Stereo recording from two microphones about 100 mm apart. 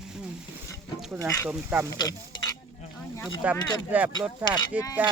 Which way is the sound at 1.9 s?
40° left (ahead or behind).